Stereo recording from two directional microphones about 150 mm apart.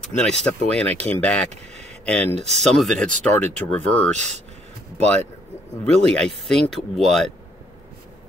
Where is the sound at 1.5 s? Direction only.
50° right (ahead or behind).